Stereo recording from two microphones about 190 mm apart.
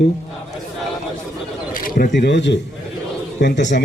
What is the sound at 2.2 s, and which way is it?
A man's voice, 65° left (ahead or behind).